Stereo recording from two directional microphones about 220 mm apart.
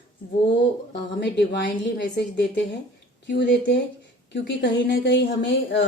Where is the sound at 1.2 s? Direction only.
55° left (ahead or behind).